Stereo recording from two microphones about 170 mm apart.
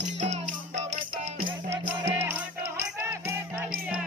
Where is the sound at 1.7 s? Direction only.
15° right (ahead or behind).